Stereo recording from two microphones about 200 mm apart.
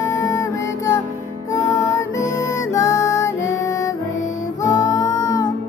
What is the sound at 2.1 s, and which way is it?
Music, 15° left (ahead or behind).